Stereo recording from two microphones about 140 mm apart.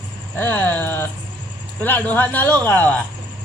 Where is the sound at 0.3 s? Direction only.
15° left (ahead or behind).